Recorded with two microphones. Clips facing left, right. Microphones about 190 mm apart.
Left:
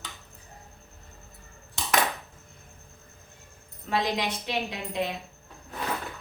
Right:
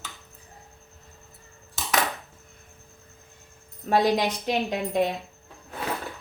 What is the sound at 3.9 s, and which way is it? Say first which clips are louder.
A woman's voice: right 6 dB; 45° right (ahead or behind).